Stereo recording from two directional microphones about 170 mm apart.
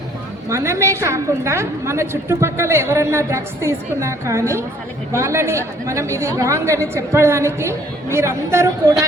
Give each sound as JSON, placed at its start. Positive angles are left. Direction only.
{"t": 0.4, "sound": "a woman's voice", "side_deg": -15}